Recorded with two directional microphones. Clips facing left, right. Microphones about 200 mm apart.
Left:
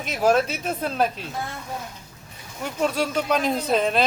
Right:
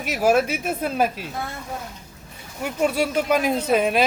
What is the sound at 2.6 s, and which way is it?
Speech, 10° right (ahead or behind).